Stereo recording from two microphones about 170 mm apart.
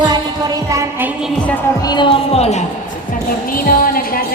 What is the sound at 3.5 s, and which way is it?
Speech, 55° left (ahead or behind).